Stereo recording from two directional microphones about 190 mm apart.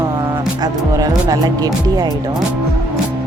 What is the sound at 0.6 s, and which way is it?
Speech, 20° right (ahead or behind).